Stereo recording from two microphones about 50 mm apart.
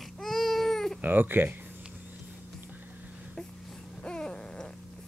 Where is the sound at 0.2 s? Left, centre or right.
Centre.